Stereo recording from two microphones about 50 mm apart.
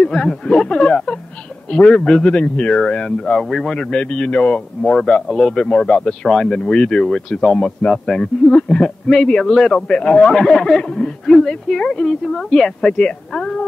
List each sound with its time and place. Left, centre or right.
0.0 s speech: centre
3.7 s speech: centre